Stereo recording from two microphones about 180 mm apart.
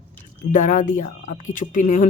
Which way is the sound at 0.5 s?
45° left (ahead or behind).